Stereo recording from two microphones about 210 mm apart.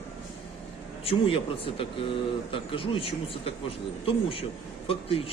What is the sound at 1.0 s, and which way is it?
Speech, 25° left (ahead or behind).